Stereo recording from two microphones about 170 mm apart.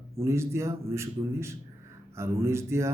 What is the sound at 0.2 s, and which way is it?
Speech, 15° right (ahead or behind).